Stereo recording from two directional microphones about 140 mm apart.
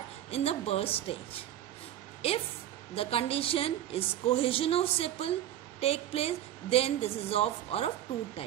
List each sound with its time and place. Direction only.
0.3 s a woman's voice: 45° left (ahead or behind)
2.9 s a woman's voice: 45° left (ahead or behind)